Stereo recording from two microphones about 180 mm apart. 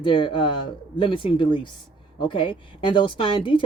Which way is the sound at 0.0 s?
25° left (ahead or behind).